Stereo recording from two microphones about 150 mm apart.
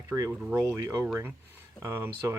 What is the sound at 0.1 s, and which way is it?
Speech, 15° right (ahead or behind).